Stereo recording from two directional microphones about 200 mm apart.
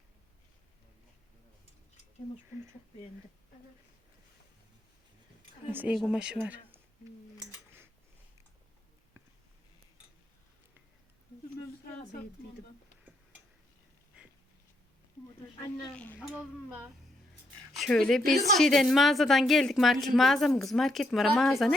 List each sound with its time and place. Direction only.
5.7 s a woman's voice: 5° right (ahead or behind)
15.6 s speech: 10° left (ahead or behind)
16.3 s a woman's voice: 5° right (ahead or behind)